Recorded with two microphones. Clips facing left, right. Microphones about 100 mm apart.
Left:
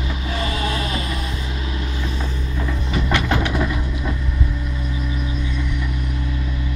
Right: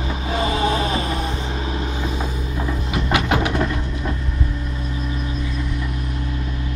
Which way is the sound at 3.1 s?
10° right (ahead or behind).